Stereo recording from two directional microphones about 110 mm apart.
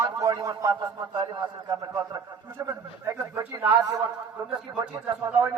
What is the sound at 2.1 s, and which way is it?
A man's voice, 30° right (ahead or behind).